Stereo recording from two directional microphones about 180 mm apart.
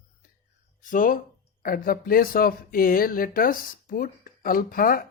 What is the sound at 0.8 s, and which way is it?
Speech, 45° left (ahead or behind).